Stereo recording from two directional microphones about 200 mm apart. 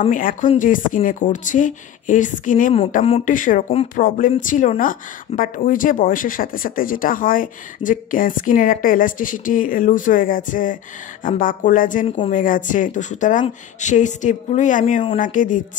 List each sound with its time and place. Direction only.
0.0 s speech: 40° left (ahead or behind)